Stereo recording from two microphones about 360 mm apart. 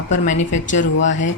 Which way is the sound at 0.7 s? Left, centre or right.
Left.